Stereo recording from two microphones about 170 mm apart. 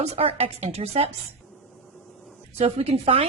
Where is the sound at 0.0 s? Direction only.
35° right (ahead or behind).